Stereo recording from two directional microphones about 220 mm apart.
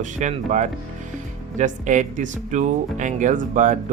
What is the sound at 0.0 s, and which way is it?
Speech, 35° right (ahead or behind).